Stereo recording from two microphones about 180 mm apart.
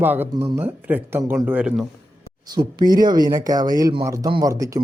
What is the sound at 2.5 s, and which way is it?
Speech, 20° right (ahead or behind).